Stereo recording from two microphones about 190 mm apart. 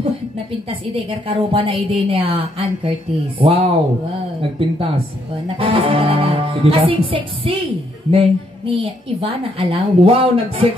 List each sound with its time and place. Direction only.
0.5 s a woman's voice: 30° right (ahead or behind)